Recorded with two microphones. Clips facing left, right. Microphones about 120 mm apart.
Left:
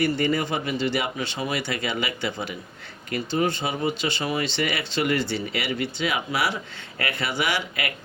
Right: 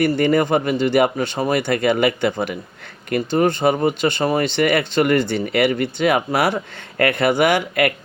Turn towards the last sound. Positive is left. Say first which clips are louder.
# right 10 dB
turn(degrees=-50)  # may be behind; listen again after turning